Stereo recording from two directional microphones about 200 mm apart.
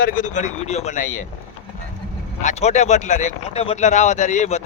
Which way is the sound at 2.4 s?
35° left (ahead or behind).